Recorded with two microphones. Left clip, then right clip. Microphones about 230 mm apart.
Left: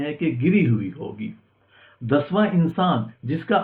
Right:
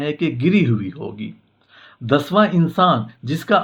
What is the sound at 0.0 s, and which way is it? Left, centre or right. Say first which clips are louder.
Speech: right 3 dB; right.